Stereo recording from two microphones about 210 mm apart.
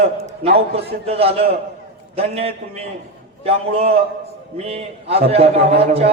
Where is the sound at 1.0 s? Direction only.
30° right (ahead or behind).